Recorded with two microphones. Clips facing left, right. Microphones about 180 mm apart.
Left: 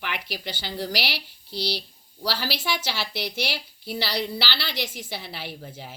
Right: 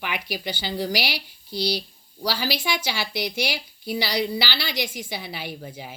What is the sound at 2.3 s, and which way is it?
A woman's voice, 10° right (ahead or behind).